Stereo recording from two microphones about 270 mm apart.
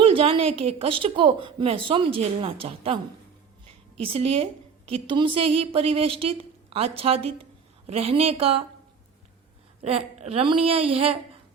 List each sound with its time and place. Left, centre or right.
0.0 s a sound: centre
0.8 s a woman's voice: centre
9.8 s a woman's voice: right